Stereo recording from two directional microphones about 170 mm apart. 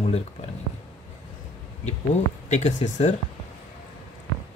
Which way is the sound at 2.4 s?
45° left (ahead or behind).